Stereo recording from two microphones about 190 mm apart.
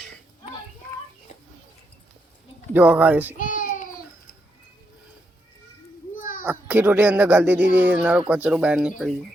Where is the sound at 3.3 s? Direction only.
45° left (ahead or behind).